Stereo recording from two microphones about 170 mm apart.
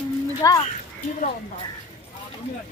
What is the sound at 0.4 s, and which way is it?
Speech, 20° left (ahead or behind).